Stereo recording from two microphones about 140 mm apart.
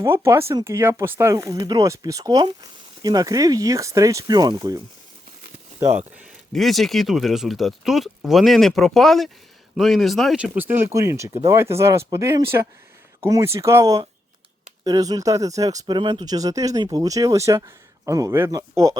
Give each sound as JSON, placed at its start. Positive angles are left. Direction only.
{"t": 0.0, "sound": "speech", "side_deg": -20}
{"t": 6.5, "sound": "speech", "side_deg": 0}